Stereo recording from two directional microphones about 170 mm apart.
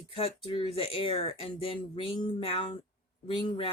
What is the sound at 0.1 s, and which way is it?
Speech, 35° left (ahead or behind).